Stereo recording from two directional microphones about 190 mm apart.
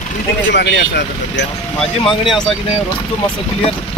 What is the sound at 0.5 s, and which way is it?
Speech, 65° left (ahead or behind).